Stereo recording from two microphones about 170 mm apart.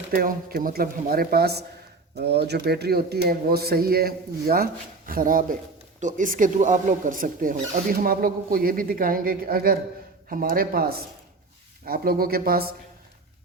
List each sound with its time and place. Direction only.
0.1 s speech: 60° right (ahead or behind)